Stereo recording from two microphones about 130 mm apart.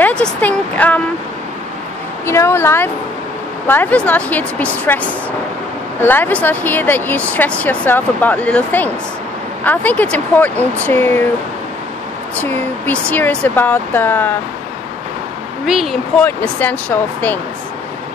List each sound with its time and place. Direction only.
0.0 s speech: 10° left (ahead or behind)
2.2 s a woman's voice: 20° left (ahead or behind)
12.4 s speech: 15° left (ahead or behind)
15.6 s speech: 5° right (ahead or behind)
16.2 s speech: 10° left (ahead or behind)